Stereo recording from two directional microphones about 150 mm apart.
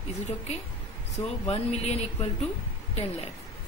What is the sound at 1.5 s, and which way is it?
Speech, 45° left (ahead or behind).